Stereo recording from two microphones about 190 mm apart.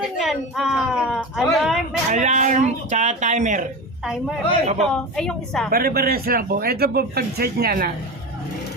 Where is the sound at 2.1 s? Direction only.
40° right (ahead or behind).